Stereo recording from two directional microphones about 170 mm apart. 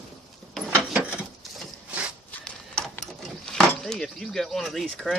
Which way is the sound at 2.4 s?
5° left (ahead or behind).